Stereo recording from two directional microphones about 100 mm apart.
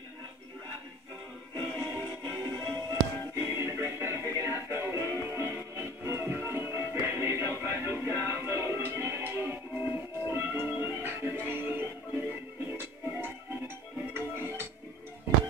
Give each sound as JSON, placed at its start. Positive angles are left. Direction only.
{"t": 1.5, "sound": "music", "side_deg": -35}